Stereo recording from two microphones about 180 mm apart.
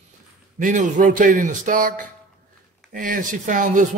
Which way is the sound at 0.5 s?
45° right (ahead or behind).